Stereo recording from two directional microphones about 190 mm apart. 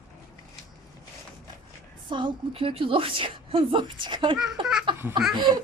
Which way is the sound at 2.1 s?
25° right (ahead or behind).